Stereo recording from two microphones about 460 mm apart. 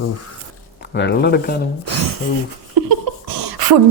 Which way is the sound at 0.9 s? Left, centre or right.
Left.